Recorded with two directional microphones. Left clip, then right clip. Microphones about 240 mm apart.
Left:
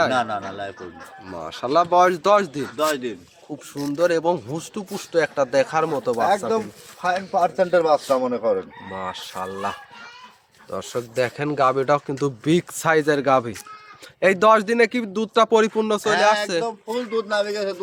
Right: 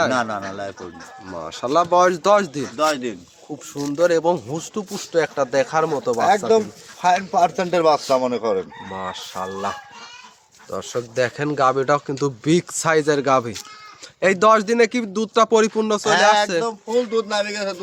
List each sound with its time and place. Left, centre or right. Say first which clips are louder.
0.1 s a man's voice: even; centre
1.5 s speech: right 1 dB; centre
2.7 s a man's voice: right 2 dB; centre
3.8 s speech: right 2 dB; centre
6.5 s speech: right 6 dB; right
8.9 s a man's voice: right 1 dB; centre